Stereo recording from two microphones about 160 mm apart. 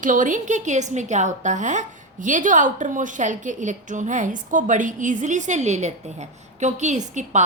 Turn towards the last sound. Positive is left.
turn(degrees=-50)  # may be behind; listen again after turning